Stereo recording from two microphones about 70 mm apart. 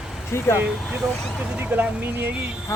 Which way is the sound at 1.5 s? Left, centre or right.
Right.